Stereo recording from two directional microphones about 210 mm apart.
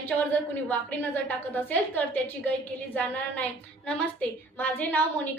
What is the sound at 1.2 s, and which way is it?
A woman's voice, 10° left (ahead or behind).